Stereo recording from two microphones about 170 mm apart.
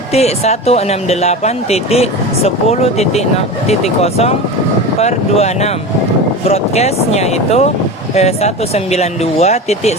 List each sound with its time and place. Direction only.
0.1 s speech: 40° left (ahead or behind)